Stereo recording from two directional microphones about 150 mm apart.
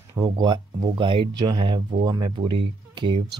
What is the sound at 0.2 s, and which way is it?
Speech, 30° right (ahead or behind).